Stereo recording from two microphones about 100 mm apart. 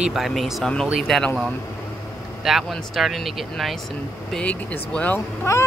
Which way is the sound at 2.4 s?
Centre (ahead or behind).